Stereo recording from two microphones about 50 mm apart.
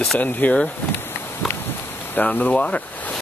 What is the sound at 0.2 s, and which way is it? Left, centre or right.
Speech, left.